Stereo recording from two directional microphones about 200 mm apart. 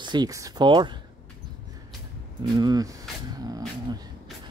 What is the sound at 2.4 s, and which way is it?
Cat, 20° right (ahead or behind).